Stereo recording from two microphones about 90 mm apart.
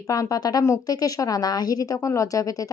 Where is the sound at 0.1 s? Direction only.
40° left (ahead or behind).